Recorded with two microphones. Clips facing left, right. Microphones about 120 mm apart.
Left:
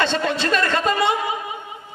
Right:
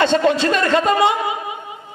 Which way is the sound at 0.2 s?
25° right (ahead or behind).